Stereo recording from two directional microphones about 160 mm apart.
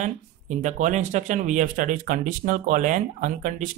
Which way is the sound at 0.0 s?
50° right (ahead or behind).